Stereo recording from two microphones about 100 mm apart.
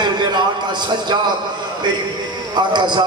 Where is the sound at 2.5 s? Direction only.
50° right (ahead or behind).